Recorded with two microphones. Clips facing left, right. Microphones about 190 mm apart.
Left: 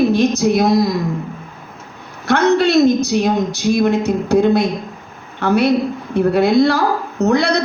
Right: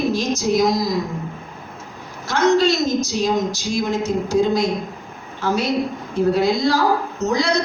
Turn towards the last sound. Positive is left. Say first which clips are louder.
# left 5 dB
turn(degrees=60)  # may be behind; listen again after turning